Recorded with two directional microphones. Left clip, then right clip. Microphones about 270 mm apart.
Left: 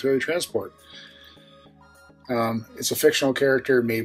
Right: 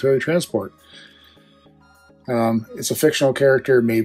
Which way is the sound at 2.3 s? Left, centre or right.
Centre.